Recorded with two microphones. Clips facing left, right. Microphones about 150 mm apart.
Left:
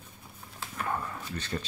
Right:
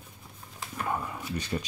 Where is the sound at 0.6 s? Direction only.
10° right (ahead or behind).